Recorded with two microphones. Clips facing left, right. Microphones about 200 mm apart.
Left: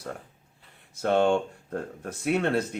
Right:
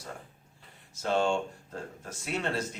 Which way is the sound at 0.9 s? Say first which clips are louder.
Left 5 dB; 60° left (ahead or behind).